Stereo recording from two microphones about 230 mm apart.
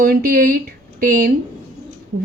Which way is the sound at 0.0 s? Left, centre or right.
Right.